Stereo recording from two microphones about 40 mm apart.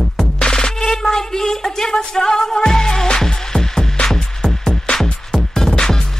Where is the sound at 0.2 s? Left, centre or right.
Centre.